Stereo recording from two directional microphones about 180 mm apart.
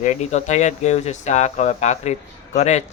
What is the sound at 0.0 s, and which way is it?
Speech, 40° left (ahead or behind).